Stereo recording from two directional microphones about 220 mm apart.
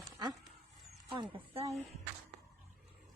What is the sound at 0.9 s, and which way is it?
Speech, 25° right (ahead or behind).